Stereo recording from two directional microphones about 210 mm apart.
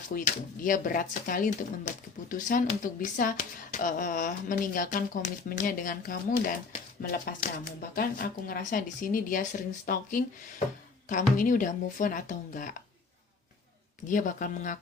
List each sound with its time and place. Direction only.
0.1 s speech: 40° left (ahead or behind)
14.1 s speech: 40° left (ahead or behind)